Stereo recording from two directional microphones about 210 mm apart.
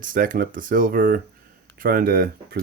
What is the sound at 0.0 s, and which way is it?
Speech, 40° right (ahead or behind).